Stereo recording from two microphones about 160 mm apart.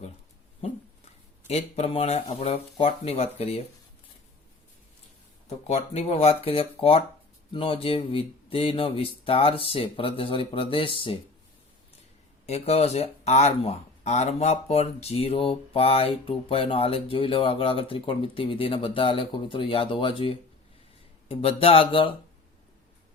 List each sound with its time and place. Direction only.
1.5 s speech: 40° left (ahead or behind)
5.5 s speech: 40° left (ahead or behind)
12.5 s speech: 40° left (ahead or behind)